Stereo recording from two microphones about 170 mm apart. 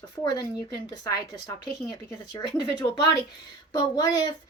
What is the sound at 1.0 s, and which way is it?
Speech, 20° left (ahead or behind).